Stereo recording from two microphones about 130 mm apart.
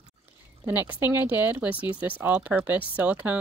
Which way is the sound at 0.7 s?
15° right (ahead or behind).